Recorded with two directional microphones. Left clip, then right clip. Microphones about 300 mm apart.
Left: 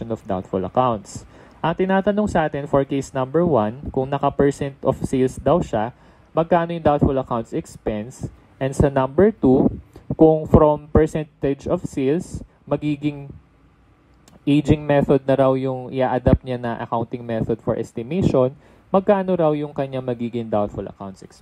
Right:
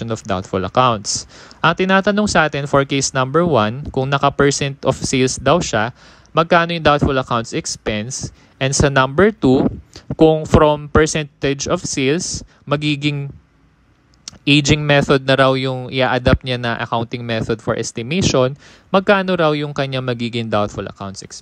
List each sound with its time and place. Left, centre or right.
0.0 s speech: left
14.2 s speech: left